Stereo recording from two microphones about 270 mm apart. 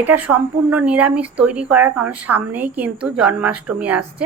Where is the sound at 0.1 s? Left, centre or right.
Centre.